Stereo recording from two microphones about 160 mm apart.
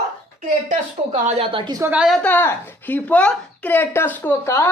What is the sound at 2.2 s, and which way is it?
Speech, 10° left (ahead or behind).